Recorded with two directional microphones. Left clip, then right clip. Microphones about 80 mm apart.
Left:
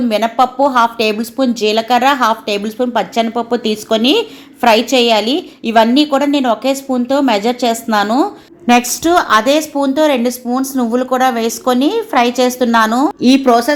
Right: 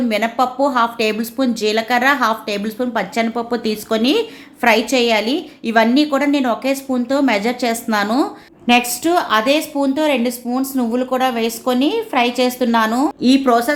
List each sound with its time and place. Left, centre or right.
0.1 s speech: centre
8.6 s a woman's voice: left